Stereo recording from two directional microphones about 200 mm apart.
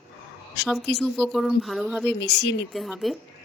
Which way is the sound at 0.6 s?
55° left (ahead or behind).